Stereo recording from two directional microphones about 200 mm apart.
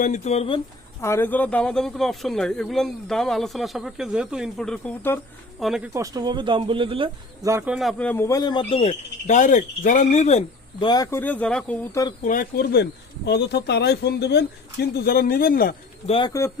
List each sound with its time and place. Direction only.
0.0 s speech: 35° left (ahead or behind)
1.0 s speech: 10° left (ahead or behind)
5.6 s speech: 5° right (ahead or behind)
5.9 s speech: 15° right (ahead or behind)
7.4 s speech: 10° right (ahead or behind); by 11.9 s 5° left (ahead or behind)
12.2 s speech: 45° left (ahead or behind)
16.0 s speech: 25° left (ahead or behind)